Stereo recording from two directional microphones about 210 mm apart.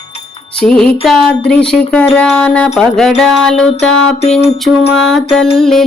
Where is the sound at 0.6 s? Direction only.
5° left (ahead or behind).